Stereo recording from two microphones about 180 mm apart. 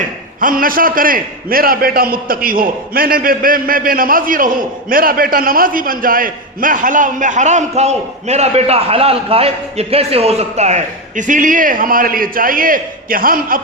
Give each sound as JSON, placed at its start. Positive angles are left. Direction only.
{"t": 0.3, "sound": "a man's voice", "side_deg": -50}